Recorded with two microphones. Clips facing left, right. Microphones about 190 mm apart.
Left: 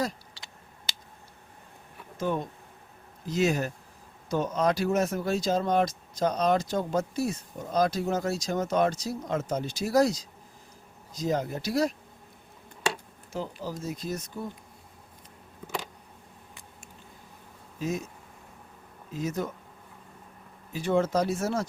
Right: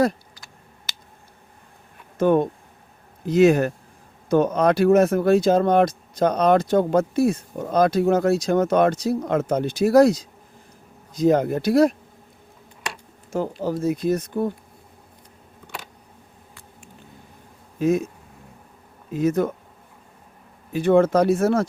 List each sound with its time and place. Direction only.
0.3 s typing: 30° left (ahead or behind)
2.1 s speech: 60° right (ahead or behind)
13.3 s speech: 55° right (ahead or behind)
17.7 s speech: 55° right (ahead or behind)
19.1 s speech: 55° right (ahead or behind)
20.7 s speech: 60° right (ahead or behind)